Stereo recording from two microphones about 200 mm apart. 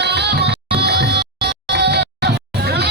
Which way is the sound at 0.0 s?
55° right (ahead or behind).